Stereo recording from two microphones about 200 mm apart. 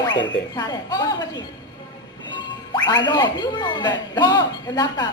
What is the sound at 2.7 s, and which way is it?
Speech, 20° left (ahead or behind).